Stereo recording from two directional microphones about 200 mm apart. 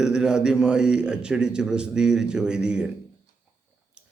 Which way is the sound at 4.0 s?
5° right (ahead or behind).